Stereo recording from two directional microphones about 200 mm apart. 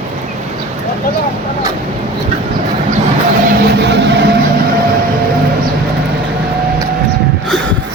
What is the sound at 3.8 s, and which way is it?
Music, 60° right (ahead or behind).